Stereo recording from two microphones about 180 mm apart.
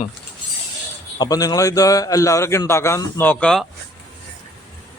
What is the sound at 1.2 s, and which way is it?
A man's voice, 20° left (ahead or behind).